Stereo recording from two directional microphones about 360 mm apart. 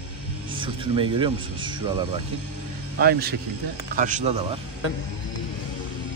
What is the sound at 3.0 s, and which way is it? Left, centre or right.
Speech, right.